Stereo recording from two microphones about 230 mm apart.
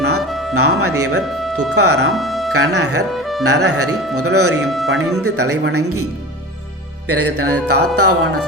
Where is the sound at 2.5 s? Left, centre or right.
Right.